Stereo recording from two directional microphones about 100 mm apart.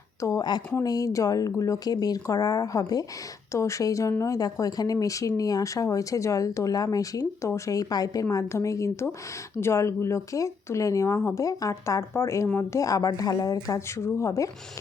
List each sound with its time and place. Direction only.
0.2 s speech: 30° left (ahead or behind)